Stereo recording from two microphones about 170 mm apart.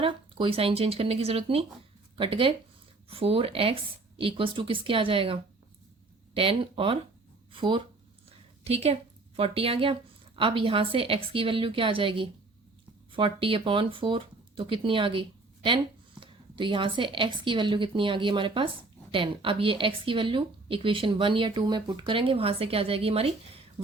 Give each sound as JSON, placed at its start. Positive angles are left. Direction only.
{"t": 0.0, "sound": "speech", "side_deg": -30}